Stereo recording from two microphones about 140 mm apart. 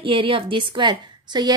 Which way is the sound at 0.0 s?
40° right (ahead or behind).